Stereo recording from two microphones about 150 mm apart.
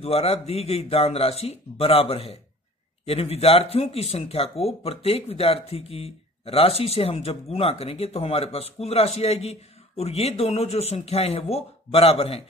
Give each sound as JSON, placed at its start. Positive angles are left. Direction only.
{"t": 0.0, "sound": "speech", "side_deg": 40}